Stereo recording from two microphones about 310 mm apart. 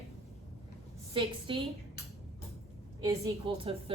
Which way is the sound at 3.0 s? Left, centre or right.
Centre.